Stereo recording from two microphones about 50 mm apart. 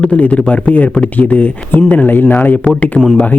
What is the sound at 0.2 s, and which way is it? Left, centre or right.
Speech, left.